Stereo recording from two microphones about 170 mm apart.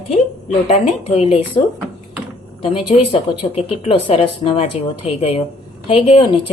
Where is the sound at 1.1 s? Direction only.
40° left (ahead or behind).